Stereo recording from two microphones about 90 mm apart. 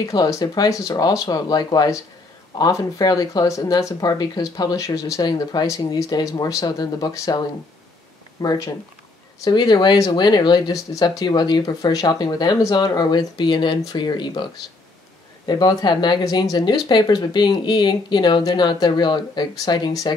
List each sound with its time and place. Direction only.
0.1 s speech: 40° left (ahead or behind)
5.5 s speech: 50° left (ahead or behind)
8.4 s speech: 45° left (ahead or behind)
9.4 s speech: 55° left (ahead or behind)
10.7 s speech: 45° left (ahead or behind)